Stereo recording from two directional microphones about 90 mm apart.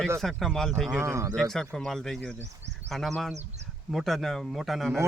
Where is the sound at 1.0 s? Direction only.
35° right (ahead or behind).